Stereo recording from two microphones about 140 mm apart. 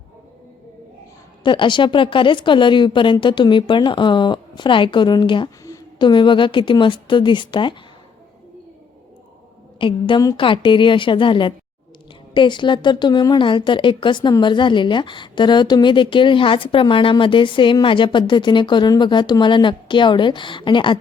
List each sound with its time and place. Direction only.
1.5 s a woman's voice: 35° left (ahead or behind)
9.7 s a woman's voice: 35° left (ahead or behind)